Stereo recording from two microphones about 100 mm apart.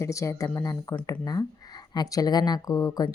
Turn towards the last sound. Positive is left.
turn(degrees=40)  # may be behind; listen again after turning